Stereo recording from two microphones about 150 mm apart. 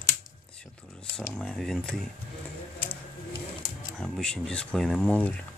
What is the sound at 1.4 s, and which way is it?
Speech, 5° left (ahead or behind).